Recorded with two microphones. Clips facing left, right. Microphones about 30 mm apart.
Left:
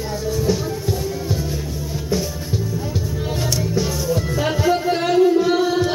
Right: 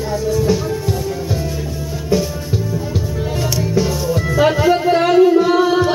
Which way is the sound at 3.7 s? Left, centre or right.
Right.